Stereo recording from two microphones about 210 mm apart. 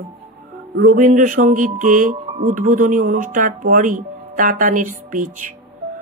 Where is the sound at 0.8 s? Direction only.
40° right (ahead or behind).